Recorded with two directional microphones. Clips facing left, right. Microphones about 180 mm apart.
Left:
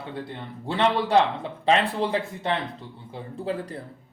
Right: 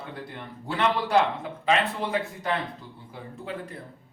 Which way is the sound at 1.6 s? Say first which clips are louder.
Left 3 dB; 30° left (ahead or behind).